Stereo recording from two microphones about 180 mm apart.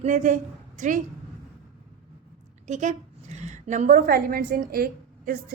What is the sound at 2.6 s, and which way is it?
A woman's voice, 40° right (ahead or behind).